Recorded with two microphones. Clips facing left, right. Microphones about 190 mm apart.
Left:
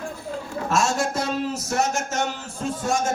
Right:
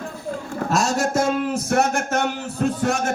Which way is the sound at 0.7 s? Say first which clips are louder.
Right 2 dB; 40° right (ahead or behind).